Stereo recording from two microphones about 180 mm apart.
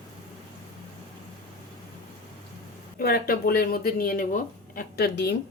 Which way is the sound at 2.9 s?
55° left (ahead or behind).